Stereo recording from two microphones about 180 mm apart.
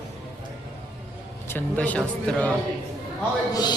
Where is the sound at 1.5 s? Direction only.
10° left (ahead or behind).